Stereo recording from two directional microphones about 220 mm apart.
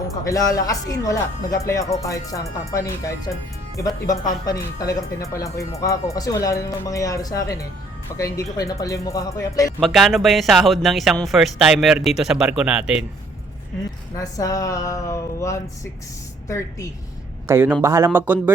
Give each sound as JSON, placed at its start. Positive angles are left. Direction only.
{"t": 0.3, "sound": "speech", "side_deg": 15}
{"t": 9.8, "sound": "speech", "side_deg": 0}
{"t": 14.2, "sound": "speech", "side_deg": 15}
{"t": 17.5, "sound": "speech", "side_deg": -10}